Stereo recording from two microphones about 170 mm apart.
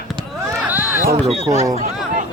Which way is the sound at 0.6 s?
10° right (ahead or behind).